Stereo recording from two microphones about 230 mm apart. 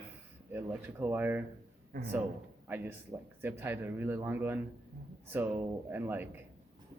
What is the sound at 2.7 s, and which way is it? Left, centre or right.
Speech, centre.